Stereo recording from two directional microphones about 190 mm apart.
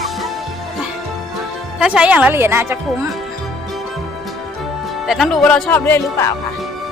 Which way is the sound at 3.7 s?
Centre (ahead or behind).